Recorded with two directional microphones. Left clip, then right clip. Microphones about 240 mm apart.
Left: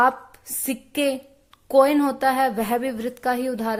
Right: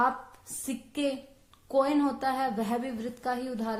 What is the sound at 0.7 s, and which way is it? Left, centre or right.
Speech, left.